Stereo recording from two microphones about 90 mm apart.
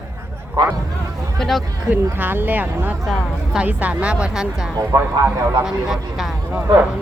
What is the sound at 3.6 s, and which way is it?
A woman's voice, 15° right (ahead or behind).